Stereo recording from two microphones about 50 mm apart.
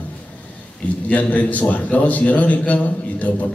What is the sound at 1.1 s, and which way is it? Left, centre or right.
A man's voice, left.